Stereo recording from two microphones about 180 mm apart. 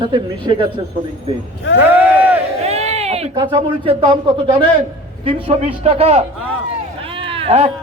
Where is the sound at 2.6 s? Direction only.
35° right (ahead or behind).